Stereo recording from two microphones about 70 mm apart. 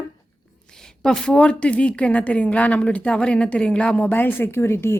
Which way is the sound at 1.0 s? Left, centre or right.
Centre.